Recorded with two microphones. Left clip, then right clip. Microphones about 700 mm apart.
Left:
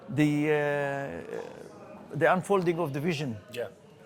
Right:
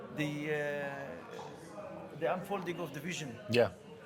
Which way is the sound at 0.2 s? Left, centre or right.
Left.